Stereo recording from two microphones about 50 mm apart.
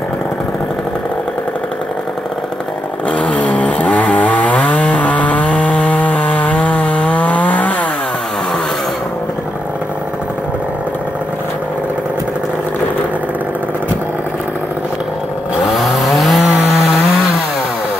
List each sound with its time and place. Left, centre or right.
3.1 s chainsaw: left
15.6 s chainsaw: centre